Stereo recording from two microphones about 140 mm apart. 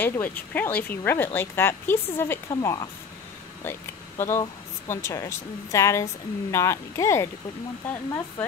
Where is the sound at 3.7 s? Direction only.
15° left (ahead or behind).